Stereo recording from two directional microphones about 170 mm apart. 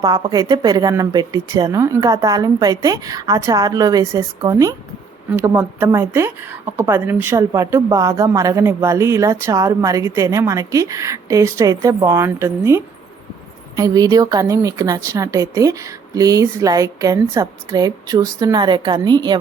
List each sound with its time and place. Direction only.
0.0 s a woman's voice: 25° right (ahead or behind)